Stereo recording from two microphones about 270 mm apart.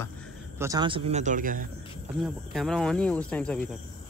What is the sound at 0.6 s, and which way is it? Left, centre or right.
Speech, centre.